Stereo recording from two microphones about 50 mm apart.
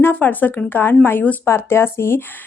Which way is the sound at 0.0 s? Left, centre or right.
Left.